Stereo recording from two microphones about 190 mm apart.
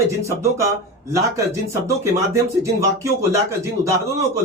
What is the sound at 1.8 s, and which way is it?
Speech, 15° right (ahead or behind).